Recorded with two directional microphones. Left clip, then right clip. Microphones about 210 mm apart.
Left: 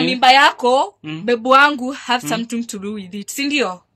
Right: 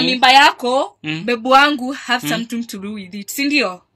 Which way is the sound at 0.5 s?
20° left (ahead or behind).